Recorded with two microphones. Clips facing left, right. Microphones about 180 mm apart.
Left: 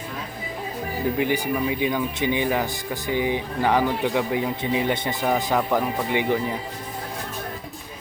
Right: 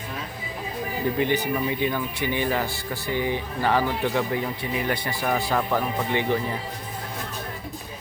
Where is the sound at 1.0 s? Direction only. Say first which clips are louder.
Left 1 dB; 10° left (ahead or behind).